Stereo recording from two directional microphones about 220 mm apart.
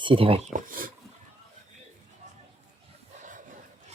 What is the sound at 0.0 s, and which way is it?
Speech, 25° right (ahead or behind).